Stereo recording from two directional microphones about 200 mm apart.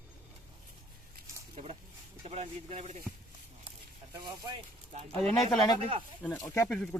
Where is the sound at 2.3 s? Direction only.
30° right (ahead or behind).